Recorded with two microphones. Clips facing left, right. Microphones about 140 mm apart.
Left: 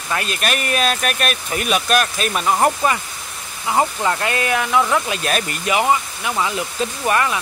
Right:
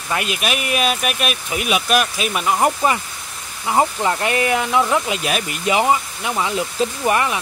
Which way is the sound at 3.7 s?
20° right (ahead or behind).